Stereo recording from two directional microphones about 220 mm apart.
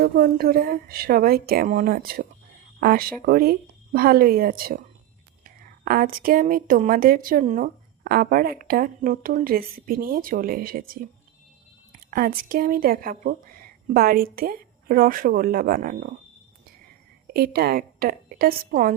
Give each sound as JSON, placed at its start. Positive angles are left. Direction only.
{"t": 0.0, "sound": "a woman's voice", "side_deg": -40}
{"t": 17.3, "sound": "a woman's voice", "side_deg": -45}